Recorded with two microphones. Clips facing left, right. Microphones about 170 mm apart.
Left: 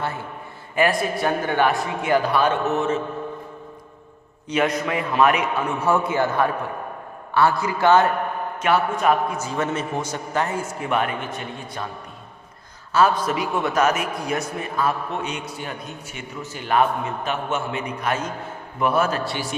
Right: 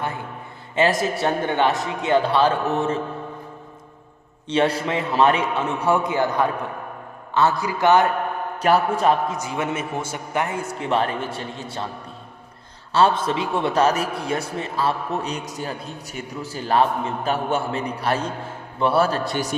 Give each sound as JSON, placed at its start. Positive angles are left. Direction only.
{"t": 0.8, "sound": "a man's voice", "side_deg": -25}
{"t": 4.4, "sound": "a man's voice", "side_deg": -30}
{"t": 5.8, "sound": "a man's voice", "side_deg": -15}
{"t": 8.6, "sound": "a man's voice", "side_deg": -35}
{"t": 9.4, "sound": "a man's voice", "side_deg": -15}
{"t": 10.8, "sound": "a man's voice", "side_deg": -30}
{"t": 12.9, "sound": "a man's voice", "side_deg": -30}